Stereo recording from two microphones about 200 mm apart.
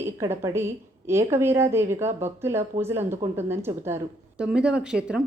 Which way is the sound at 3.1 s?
35° right (ahead or behind).